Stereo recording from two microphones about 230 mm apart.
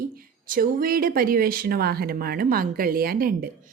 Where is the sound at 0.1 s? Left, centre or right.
Right.